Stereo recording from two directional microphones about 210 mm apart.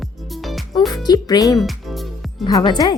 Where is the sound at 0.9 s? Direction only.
20° left (ahead or behind).